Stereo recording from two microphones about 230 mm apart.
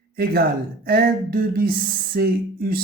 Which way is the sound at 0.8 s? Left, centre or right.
Right.